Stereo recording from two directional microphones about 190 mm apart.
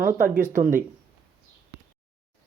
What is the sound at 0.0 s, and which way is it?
Speech, 45° right (ahead or behind).